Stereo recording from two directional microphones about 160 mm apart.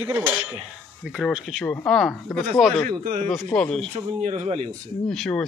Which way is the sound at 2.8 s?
60° right (ahead or behind).